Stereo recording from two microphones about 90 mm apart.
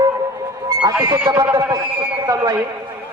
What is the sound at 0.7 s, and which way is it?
Music, 45° right (ahead or behind).